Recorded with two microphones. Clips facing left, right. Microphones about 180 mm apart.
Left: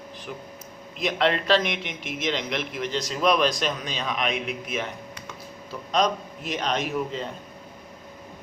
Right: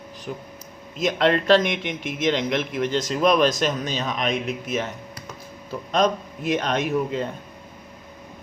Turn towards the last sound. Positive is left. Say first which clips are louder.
# right 4 dB
turn(degrees=-55)  # may be behind; listen again after turning